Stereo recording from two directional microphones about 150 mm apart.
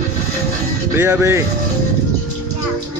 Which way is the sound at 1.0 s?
15° right (ahead or behind).